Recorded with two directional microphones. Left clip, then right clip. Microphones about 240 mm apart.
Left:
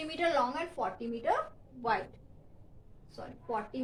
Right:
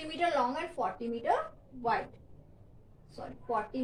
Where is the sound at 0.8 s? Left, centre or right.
Centre.